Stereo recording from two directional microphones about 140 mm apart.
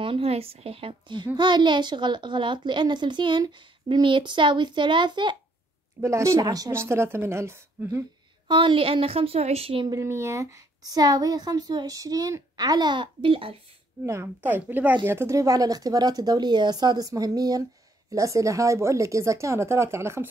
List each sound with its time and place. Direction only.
0.0 s a child's voice: 45° right (ahead or behind)
5.9 s a woman's voice: 20° right (ahead or behind)
8.5 s a child's voice: 35° right (ahead or behind)
9.8 s a woman's voice: 20° right (ahead or behind); by 13.6 s 40° right (ahead or behind)
14.0 s a woman's voice: 20° right (ahead or behind)